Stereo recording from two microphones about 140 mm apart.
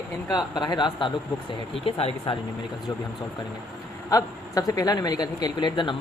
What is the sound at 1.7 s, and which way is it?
Speech, 45° left (ahead or behind).